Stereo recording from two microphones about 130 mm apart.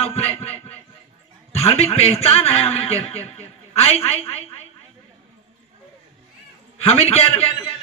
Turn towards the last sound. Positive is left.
turn(degrees=50)  # may be behind; listen again after turning